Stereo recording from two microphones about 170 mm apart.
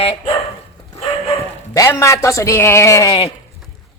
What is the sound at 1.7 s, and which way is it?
A man's voice, 20° left (ahead or behind).